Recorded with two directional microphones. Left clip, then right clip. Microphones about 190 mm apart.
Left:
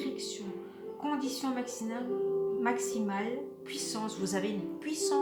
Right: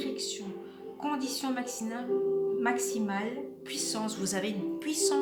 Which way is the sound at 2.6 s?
35° right (ahead or behind).